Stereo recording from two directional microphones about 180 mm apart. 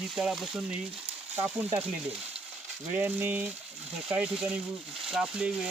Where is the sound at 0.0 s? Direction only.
Centre (ahead or behind).